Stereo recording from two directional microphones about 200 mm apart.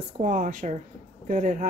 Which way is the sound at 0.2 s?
40° right (ahead or behind).